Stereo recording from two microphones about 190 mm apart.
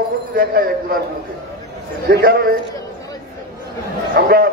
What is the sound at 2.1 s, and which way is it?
Speech, 50° right (ahead or behind).